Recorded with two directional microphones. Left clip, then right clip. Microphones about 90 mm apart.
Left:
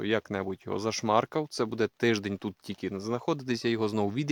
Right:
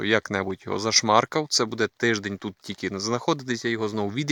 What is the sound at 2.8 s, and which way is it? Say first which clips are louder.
Speech: right 6 dB; 20° right (ahead or behind).